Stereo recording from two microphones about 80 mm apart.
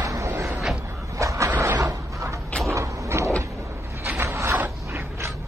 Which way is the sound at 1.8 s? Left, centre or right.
Right.